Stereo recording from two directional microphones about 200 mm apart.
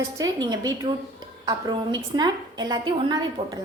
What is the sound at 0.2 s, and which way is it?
A woman's voice, 20° right (ahead or behind).